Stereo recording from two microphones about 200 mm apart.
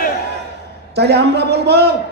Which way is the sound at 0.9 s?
55° right (ahead or behind).